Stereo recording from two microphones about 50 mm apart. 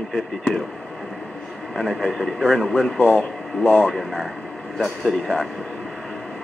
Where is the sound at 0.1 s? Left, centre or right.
Centre.